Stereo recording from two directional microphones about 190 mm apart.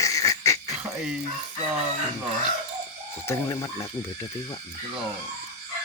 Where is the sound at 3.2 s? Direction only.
15° left (ahead or behind).